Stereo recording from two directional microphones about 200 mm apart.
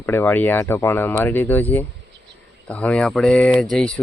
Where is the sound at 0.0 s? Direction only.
10° left (ahead or behind).